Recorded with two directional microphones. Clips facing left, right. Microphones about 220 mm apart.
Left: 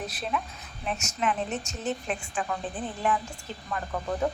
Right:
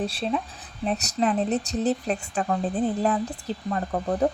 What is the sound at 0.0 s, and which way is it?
Speech, 30° right (ahead or behind).